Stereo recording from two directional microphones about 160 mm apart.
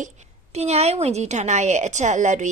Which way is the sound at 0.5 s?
45° right (ahead or behind).